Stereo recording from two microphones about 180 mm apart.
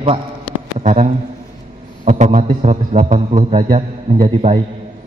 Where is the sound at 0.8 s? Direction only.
40° right (ahead or behind).